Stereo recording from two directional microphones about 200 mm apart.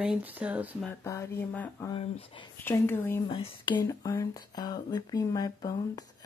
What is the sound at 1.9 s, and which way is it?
Speech, 25° left (ahead or behind).